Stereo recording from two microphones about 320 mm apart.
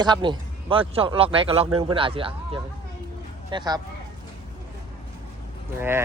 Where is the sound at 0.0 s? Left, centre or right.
Centre.